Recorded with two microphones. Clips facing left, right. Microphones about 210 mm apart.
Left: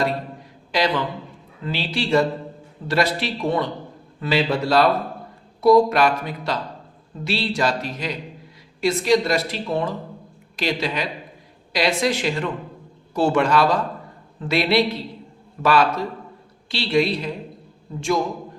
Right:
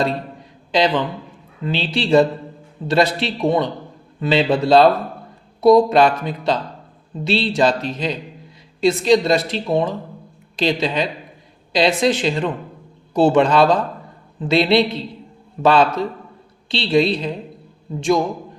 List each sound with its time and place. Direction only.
0.7 s a woman's voice: 20° right (ahead or behind)